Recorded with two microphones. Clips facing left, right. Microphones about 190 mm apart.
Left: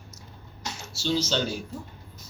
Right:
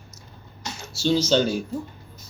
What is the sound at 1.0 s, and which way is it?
Speech, 15° right (ahead or behind).